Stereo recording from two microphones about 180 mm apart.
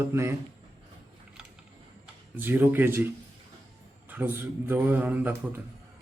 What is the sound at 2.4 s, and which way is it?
Speech, 10° right (ahead or behind).